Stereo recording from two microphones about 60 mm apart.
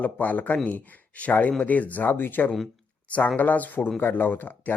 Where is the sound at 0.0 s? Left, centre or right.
Left.